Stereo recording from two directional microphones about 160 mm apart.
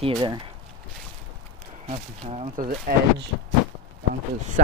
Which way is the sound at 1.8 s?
40° right (ahead or behind).